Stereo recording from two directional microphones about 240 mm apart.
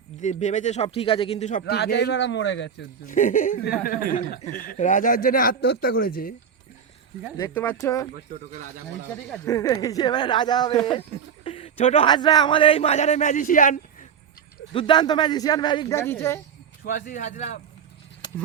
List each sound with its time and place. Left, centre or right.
0.2 s speech: left
3.1 s speech: left
7.3 s speech: centre
9.3 s a man's voice: centre; by 13.7 s left
14.7 s speech: centre
16.8 s speech: left